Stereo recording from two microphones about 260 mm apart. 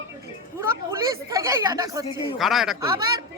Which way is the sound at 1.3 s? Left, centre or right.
Centre.